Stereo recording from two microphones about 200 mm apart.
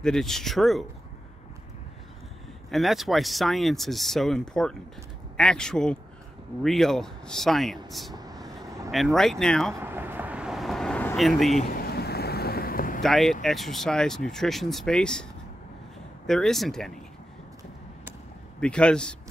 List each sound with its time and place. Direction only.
0.0 s speech: centre (ahead or behind)
2.7 s speech: centre (ahead or behind)
8.1 s vehicle: 20° right (ahead or behind)
8.9 s speech: centre (ahead or behind)
9.8 s vehicle: 10° right (ahead or behind)
11.7 s boat: 50° left (ahead or behind)
13.0 s speech: centre (ahead or behind)
16.3 s speech: centre (ahead or behind)
18.6 s speech: 5° left (ahead or behind)